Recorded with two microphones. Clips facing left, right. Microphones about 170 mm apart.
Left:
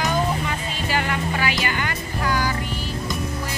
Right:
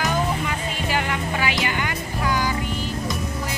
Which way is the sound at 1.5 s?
20° right (ahead or behind).